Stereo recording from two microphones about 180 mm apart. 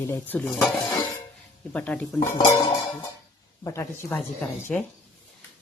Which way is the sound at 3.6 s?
15° left (ahead or behind).